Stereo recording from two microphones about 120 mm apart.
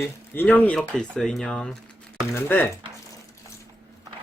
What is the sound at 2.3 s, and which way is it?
Speech, 20° left (ahead or behind).